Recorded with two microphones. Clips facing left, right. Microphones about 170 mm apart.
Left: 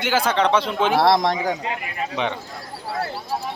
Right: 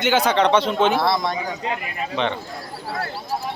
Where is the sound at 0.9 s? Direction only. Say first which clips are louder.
Left 4 dB; 90° left.